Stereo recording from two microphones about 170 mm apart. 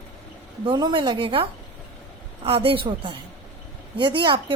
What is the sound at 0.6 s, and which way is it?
A woman's voice, 25° right (ahead or behind).